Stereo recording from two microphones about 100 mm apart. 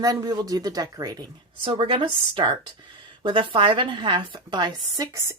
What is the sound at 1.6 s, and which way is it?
A woman's voice, 60° right (ahead or behind).